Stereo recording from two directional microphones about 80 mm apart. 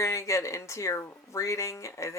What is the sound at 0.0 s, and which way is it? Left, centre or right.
Speech, left.